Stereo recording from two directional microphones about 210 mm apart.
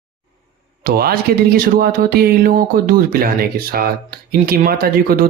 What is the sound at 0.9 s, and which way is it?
Speech, 45° right (ahead or behind).